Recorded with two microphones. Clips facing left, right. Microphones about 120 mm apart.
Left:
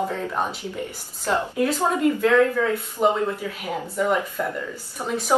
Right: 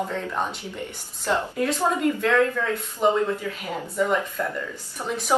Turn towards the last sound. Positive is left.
turn(degrees=20)  # may be behind; listen again after turning